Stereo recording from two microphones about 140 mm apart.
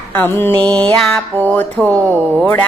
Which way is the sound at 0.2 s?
15° left (ahead or behind).